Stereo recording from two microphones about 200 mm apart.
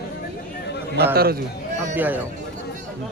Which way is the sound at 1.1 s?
50° right (ahead or behind).